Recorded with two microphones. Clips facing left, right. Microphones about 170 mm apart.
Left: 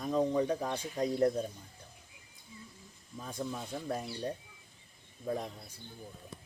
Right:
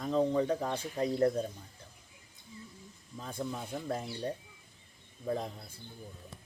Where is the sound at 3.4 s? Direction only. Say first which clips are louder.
Right 1 dB; 10° right (ahead or behind).